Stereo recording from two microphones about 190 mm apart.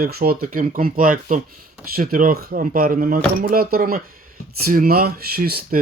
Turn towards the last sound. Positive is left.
turn(degrees=-50)  # may be behind; listen again after turning